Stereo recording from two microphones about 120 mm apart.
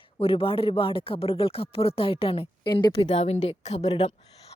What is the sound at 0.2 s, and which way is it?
A woman's voice, 50° left (ahead or behind).